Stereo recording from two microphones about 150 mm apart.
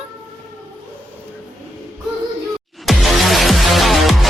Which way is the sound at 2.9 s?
Centre (ahead or behind).